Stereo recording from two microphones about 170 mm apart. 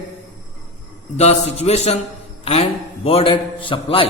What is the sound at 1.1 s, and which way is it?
A man's voice, 40° left (ahead or behind).